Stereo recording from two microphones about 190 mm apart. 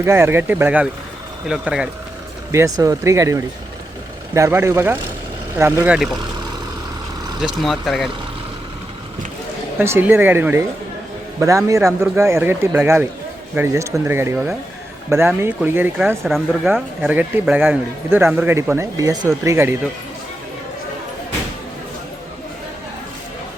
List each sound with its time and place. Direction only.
0.0 s speech: 15° right (ahead or behind)
2.5 s speech: 15° right (ahead or behind)
7.4 s speech: centre (ahead or behind)
9.7 s speech: 10° right (ahead or behind)
16.2 s speech: centre (ahead or behind)